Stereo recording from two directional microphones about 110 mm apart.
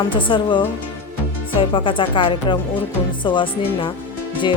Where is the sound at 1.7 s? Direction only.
50° left (ahead or behind).